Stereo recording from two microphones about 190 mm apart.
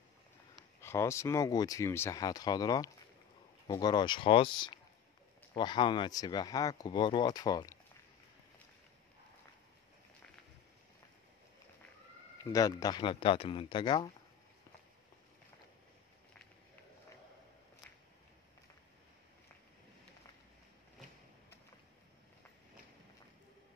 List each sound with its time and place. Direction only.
0.7 s speech: 15° left (ahead or behind)
12.4 s speech: 20° left (ahead or behind)